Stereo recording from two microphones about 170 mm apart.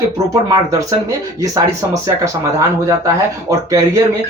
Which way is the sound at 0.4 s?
20° right (ahead or behind).